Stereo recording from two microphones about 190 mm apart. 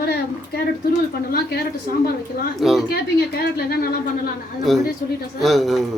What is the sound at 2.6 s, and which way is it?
Speech, centre (ahead or behind).